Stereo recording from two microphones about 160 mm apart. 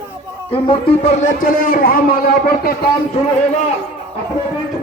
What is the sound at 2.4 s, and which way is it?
Speech, 75° left (ahead or behind).